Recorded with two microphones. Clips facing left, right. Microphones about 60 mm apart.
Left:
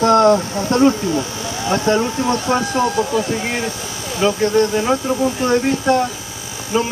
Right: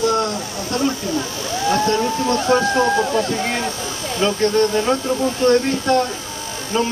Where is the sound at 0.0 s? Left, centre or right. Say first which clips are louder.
Left 7 dB; left.